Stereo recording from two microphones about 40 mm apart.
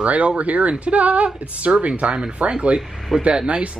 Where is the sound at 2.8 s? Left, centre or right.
Centre.